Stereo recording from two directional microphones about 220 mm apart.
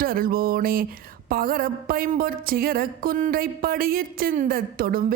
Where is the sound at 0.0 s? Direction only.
40° right (ahead or behind).